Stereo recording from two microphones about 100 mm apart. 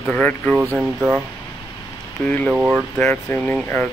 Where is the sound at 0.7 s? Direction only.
15° right (ahead or behind).